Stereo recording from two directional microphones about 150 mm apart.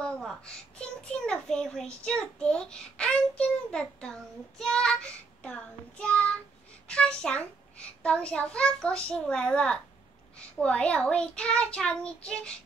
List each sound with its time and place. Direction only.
0.0 s a child's voice: 5° left (ahead or behind)